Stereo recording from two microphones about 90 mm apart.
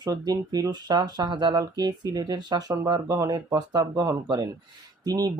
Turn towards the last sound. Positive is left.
turn(degrees=-45)  # may be behind; listen again after turning